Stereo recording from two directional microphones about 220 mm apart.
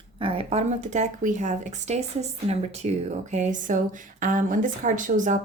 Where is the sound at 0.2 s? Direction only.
25° right (ahead or behind).